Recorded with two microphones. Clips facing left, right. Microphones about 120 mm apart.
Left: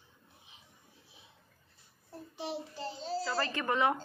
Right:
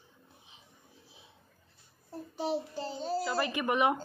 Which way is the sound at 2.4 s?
40° right (ahead or behind).